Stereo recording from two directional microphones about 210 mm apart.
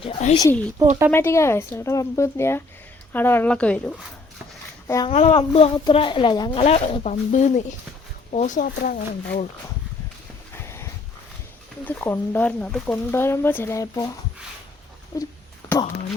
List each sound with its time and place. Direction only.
0.0 s a sound: 30° left (ahead or behind)
0.3 s speech: 10° left (ahead or behind)
4.9 s speech: 15° left (ahead or behind)
5.1 s speech: 30° left (ahead or behind)
10.5 s dog: 15° left (ahead or behind)
11.9 s speech: 10° left (ahead or behind)
15.1 s speech: 15° left (ahead or behind)